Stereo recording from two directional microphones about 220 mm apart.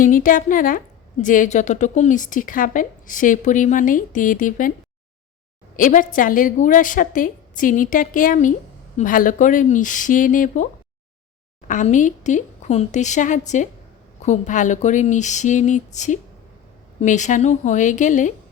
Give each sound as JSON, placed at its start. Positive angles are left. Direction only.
{"t": 0.0, "sound": "a woman's voice", "side_deg": 40}
{"t": 5.7, "sound": "a woman's voice", "side_deg": 35}
{"t": 11.7, "sound": "a woman's voice", "side_deg": 35}